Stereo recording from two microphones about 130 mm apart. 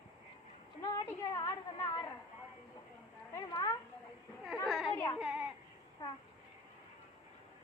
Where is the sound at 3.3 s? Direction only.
30° left (ahead or behind).